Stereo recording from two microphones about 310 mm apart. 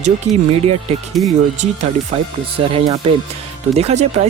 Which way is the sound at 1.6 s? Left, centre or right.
Centre.